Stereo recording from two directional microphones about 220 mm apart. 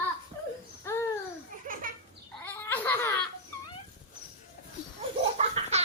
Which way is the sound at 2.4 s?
10° left (ahead or behind).